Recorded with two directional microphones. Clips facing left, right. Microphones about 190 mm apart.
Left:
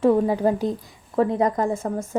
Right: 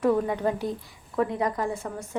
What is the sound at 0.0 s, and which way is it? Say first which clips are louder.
A woman's voice: left 5 dB; 25° left (ahead or behind).